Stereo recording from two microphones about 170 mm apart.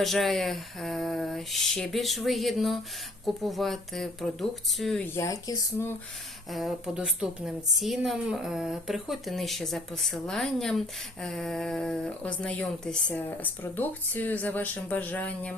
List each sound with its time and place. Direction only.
0.0 s a woman's voice: centre (ahead or behind)
5.0 s speech: 15° left (ahead or behind)
6.5 s a woman's voice: centre (ahead or behind)